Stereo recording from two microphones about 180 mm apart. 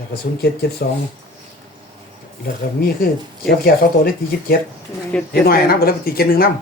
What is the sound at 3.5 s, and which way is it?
Speech, 55° left (ahead or behind).